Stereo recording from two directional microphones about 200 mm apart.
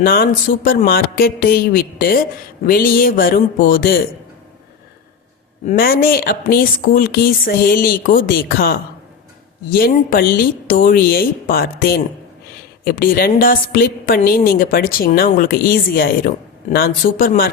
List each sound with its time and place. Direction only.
0.0 s a woman's voice: 45° left (ahead or behind)
5.6 s a woman's voice: 50° left (ahead or behind)